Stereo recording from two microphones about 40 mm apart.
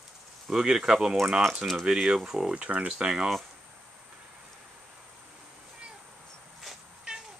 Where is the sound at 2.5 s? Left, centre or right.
Right.